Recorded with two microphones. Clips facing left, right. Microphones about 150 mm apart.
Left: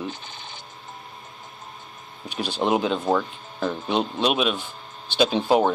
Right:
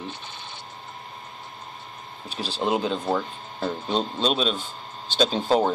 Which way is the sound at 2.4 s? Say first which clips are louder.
Left 2 dB; 15° left (ahead or behind).